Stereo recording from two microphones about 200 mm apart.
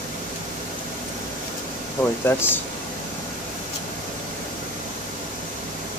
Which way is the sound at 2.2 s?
10° left (ahead or behind).